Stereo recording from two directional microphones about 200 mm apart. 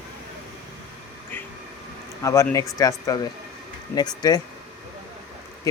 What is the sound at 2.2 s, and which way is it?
Speech, 15° left (ahead or behind).